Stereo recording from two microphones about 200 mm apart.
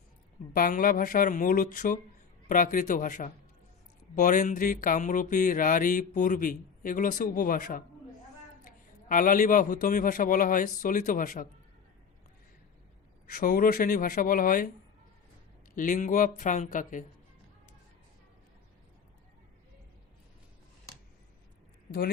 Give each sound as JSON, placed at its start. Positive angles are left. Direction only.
{"t": 0.5, "sound": "speech", "side_deg": 45}
{"t": 13.2, "sound": "speech", "side_deg": 45}
{"t": 15.7, "sound": "speech", "side_deg": 40}